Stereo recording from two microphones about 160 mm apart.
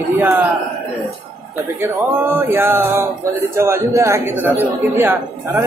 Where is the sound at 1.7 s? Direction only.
15° right (ahead or behind).